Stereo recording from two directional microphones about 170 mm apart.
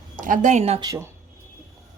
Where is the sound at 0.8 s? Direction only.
20° right (ahead or behind).